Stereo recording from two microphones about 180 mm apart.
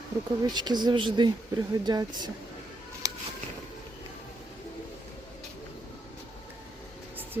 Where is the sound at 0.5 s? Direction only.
25° right (ahead or behind).